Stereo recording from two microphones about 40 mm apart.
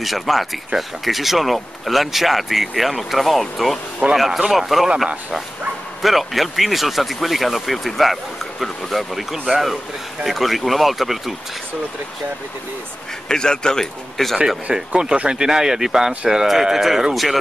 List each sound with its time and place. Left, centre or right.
0.0 s speech: centre
13.3 s speech: centre
15.0 s speech: right; by 17.4 s centre